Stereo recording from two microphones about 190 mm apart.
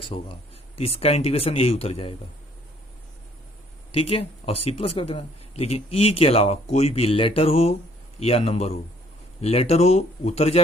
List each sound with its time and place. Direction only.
0.1 s speech: 30° left (ahead or behind)
3.9 s speech: 30° left (ahead or behind)